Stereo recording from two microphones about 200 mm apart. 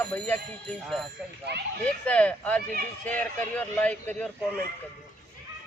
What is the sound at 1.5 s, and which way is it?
Speech, 55° right (ahead or behind).